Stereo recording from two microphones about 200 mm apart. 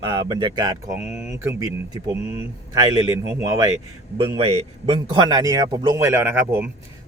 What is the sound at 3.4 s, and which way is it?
A man's voice, 15° right (ahead or behind).